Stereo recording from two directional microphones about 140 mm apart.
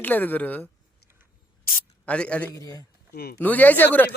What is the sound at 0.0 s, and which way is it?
Speech, 10° left (ahead or behind).